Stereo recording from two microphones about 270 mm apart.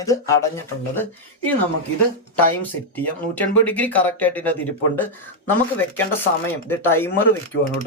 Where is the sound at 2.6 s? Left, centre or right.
Centre.